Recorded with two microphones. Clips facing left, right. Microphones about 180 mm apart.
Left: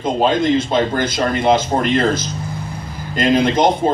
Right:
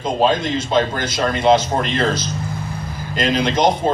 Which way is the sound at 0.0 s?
50° left (ahead or behind).